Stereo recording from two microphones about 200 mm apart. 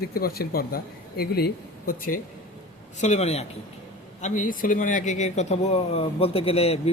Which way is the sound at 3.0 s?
35° left (ahead or behind).